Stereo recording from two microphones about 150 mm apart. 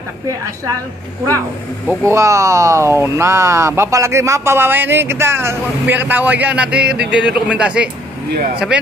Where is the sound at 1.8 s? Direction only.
20° right (ahead or behind).